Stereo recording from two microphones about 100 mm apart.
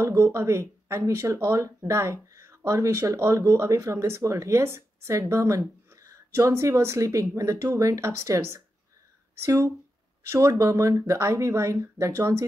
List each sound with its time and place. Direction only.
0.1 s speech: 30° right (ahead or behind)
10.3 s speech: 30° right (ahead or behind)